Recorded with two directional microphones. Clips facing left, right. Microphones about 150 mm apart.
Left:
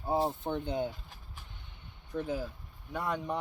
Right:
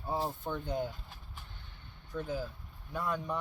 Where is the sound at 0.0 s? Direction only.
25° left (ahead or behind).